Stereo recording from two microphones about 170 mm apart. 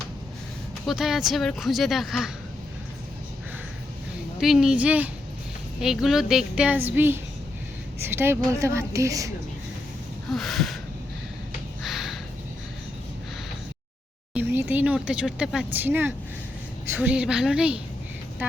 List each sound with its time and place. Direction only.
0.9 s speech: centre (ahead or behind)
4.4 s a woman's voice: 5° right (ahead or behind); by 9.3 s 20° right (ahead or behind)
10.3 s speech: centre (ahead or behind)
11.8 s a sound: centre (ahead or behind)
14.3 s a sound: 10° right (ahead or behind)
17.0 s speech: 5° right (ahead or behind)